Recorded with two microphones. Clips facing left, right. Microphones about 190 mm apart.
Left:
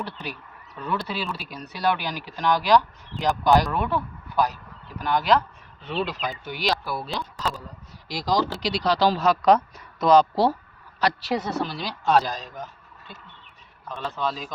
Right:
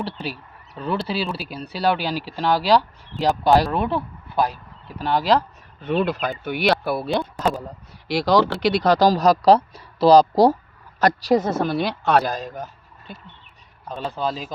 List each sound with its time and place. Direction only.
0.0 s speech: 30° right (ahead or behind)
5.8 s a woman's voice: 50° right (ahead or behind); by 8.5 s 65° right (ahead or behind)
8.6 s a woman's voice: 50° right (ahead or behind)
14.0 s speech: 30° right (ahead or behind)